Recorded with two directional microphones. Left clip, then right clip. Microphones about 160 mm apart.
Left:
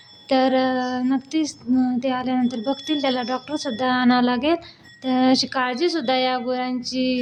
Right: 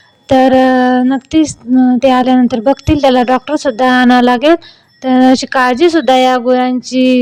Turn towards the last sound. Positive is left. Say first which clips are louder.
# right 12 dB
turn(degrees=-55)  # may be behind; listen again after turning